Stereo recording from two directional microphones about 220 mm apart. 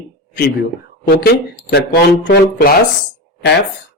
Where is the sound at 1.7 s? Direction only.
45° left (ahead or behind).